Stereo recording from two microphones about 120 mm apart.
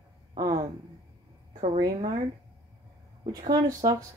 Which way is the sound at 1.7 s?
35° right (ahead or behind).